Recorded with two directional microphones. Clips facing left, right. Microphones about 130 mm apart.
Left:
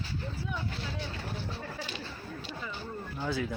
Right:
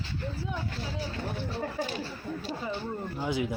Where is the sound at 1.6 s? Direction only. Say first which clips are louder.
Right 7 dB; 45° right (ahead or behind).